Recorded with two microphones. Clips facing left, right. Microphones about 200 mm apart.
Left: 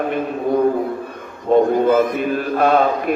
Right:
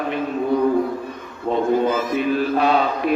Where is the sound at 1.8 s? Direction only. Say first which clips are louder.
Left 4 dB; 55° left (ahead or behind).